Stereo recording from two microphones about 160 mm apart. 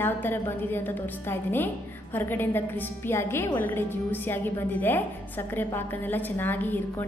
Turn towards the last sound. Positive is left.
turn(degrees=10)  # may be behind; listen again after turning